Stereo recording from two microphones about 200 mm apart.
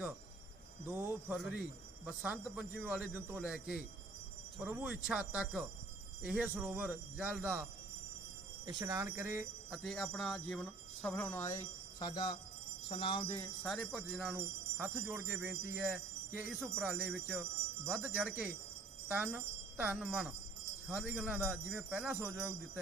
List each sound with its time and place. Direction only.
0.9 s speech: 10° right (ahead or behind)
8.6 s speech: 15° right (ahead or behind)
9.6 s speech: centre (ahead or behind); by 12.4 s 20° left (ahead or behind)
12.9 s jingle bell: 25° left (ahead or behind)
13.7 s speech: centre (ahead or behind)